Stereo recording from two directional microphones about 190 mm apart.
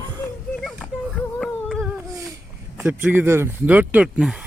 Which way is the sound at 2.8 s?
10° right (ahead or behind).